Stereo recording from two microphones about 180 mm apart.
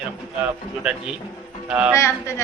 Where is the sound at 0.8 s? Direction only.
5° right (ahead or behind).